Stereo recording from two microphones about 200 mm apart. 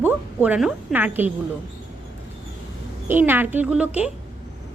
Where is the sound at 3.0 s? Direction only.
10° right (ahead or behind).